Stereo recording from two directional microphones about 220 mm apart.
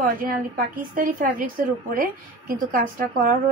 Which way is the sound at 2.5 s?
40° right (ahead or behind).